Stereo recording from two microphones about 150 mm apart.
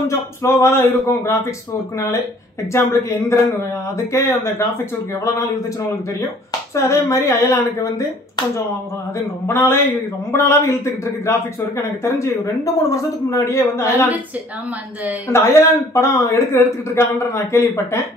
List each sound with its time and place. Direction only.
0.1 s a man's voice: 20° left (ahead or behind)
2.7 s speech: 20° left (ahead or behind)
6.7 s a man's voice: 20° left (ahead or behind)
9.5 s a man's voice: 15° left (ahead or behind)
15.2 s a man's voice: 20° left (ahead or behind)